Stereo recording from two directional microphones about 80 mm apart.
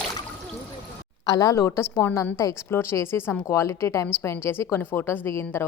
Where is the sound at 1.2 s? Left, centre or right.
Left.